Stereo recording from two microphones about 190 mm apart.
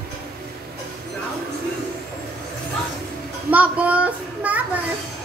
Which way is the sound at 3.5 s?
10° right (ahead or behind).